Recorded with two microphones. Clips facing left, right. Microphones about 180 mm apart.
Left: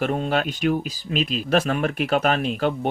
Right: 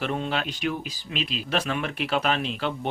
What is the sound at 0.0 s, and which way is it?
Speech, 45° left (ahead or behind).